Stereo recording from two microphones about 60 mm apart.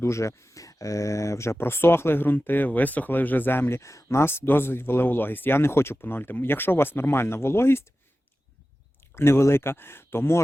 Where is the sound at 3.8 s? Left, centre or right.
Left.